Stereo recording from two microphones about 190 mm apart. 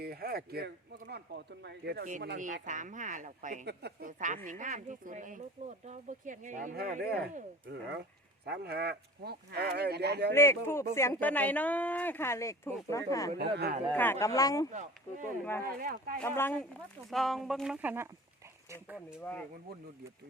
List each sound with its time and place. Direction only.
0.0 s speech: 55° right (ahead or behind)
3.7 s speech: 60° right (ahead or behind)
4.4 s speech: 40° right (ahead or behind); by 10.3 s 60° right (ahead or behind)
10.3 s speech: 15° left (ahead or behind)
13.4 s speech: 60° right (ahead or behind)
13.9 s speech: 10° left (ahead or behind)
15.8 s speech: 50° right (ahead or behind)
16.1 s speech: 10° left (ahead or behind); by 18.1 s 10° right (ahead or behind)
19.2 s speech: 5° left (ahead or behind)